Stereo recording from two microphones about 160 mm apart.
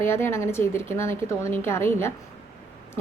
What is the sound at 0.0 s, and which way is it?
A woman's voice, 15° left (ahead or behind).